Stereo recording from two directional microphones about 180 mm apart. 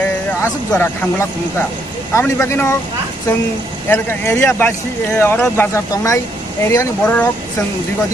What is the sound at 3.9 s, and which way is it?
A man's voice, 15° left (ahead or behind).